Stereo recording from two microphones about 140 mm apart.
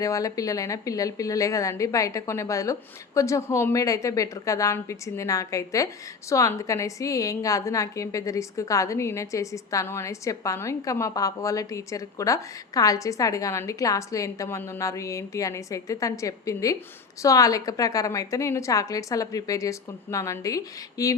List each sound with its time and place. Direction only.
0.0 s a woman's voice: 25° left (ahead or behind)